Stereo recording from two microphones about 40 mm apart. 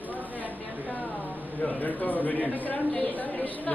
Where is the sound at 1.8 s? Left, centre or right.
Left.